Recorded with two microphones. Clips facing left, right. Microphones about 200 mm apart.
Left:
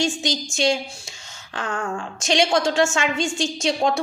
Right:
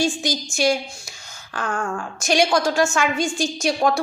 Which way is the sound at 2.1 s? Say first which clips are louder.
Right 1 dB; 25° left (ahead or behind).